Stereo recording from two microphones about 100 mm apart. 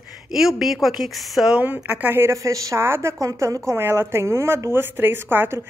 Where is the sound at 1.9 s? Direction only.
15° right (ahead or behind).